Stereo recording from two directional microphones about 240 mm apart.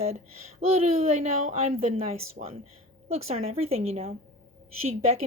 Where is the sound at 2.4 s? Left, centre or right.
Right.